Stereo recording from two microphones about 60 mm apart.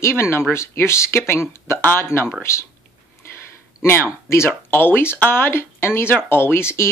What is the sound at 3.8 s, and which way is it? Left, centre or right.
Speech, left.